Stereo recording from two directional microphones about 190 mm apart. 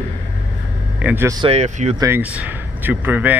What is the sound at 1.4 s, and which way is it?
Speech, 30° right (ahead or behind).